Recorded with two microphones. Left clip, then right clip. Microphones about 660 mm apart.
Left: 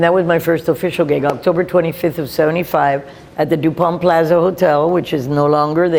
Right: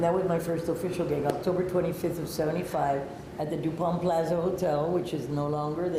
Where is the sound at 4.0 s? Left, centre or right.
Left.